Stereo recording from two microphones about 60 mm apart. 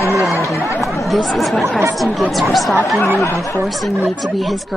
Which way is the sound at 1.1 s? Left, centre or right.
Centre.